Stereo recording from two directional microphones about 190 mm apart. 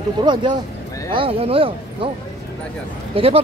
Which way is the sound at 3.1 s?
30° right (ahead or behind).